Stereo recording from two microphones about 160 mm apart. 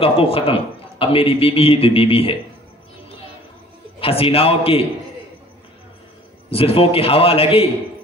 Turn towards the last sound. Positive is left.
turn(degrees=35)  # may be behind; listen again after turning